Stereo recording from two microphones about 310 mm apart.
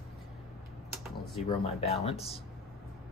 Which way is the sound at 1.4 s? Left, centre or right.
Centre.